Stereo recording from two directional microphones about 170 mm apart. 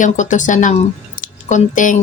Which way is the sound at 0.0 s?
45° left (ahead or behind).